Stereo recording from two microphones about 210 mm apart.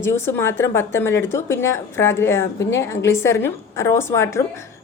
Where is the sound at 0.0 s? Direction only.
10° left (ahead or behind).